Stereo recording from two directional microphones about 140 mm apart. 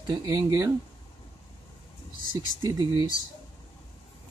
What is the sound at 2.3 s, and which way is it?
Speech, 30° right (ahead or behind).